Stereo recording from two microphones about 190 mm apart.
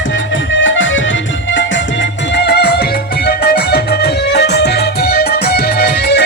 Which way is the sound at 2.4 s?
60° left (ahead or behind).